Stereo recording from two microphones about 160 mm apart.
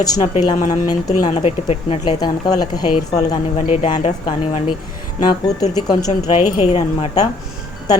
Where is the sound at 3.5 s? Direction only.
45° left (ahead or behind).